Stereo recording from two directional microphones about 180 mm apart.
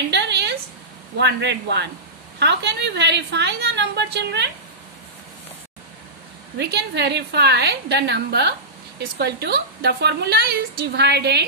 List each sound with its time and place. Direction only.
0.1 s a sound: 70° right (ahead or behind)
1.1 s a woman's voice: 70° right (ahead or behind)
6.6 s a woman's voice: 70° right (ahead or behind)